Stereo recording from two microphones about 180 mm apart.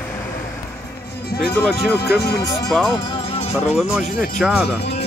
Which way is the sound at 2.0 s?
65° left (ahead or behind).